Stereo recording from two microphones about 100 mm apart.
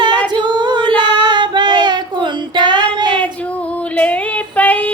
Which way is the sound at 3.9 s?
15° left (ahead or behind).